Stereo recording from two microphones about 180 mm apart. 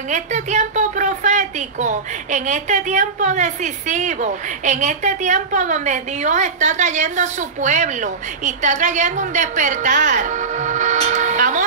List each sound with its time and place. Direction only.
0.1 s speech: 40° right (ahead or behind)